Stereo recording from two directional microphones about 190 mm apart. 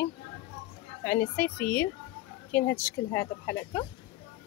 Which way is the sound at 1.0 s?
10° left (ahead or behind).